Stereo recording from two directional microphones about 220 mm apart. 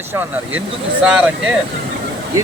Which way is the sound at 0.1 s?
10° right (ahead or behind).